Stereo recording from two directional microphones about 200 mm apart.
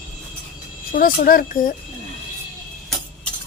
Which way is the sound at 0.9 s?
45° left (ahead or behind).